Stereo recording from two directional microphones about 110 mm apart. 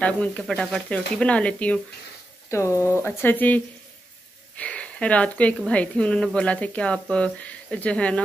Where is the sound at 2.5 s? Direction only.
25° left (ahead or behind).